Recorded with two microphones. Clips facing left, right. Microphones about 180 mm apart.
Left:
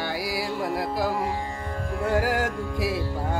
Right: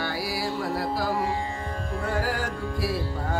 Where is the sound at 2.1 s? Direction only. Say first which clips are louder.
Left 6 dB; 20° left (ahead or behind).